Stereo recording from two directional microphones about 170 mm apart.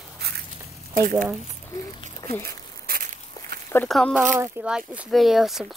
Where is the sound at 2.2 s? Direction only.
15° left (ahead or behind).